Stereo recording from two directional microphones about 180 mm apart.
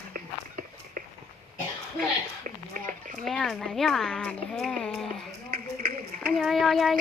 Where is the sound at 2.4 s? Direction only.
45° right (ahead or behind).